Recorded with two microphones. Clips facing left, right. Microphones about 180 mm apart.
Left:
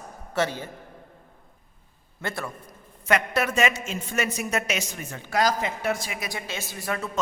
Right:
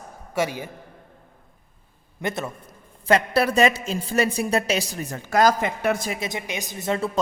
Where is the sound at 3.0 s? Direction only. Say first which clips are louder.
Right 5 dB; 35° right (ahead or behind); by 6.1 s 50° right (ahead or behind).